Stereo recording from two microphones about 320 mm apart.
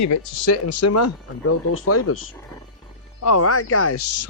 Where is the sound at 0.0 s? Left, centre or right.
Left.